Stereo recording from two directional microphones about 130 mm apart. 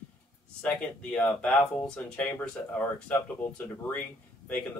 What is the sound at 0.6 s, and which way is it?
Speech, 10° left (ahead or behind).